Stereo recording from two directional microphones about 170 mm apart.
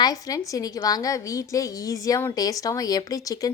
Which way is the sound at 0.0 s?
20° left (ahead or behind).